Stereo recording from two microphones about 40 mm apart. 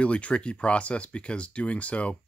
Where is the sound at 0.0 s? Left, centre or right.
Left.